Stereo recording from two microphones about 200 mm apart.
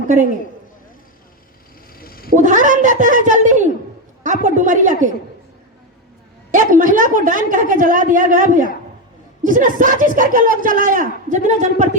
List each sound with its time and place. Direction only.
2.0 s cat: 50° left (ahead or behind)
2.3 s speech: 40° right (ahead or behind)
6.5 s speech: 40° right (ahead or behind)